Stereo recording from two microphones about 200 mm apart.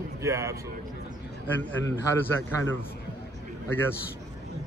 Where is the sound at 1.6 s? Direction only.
10° left (ahead or behind).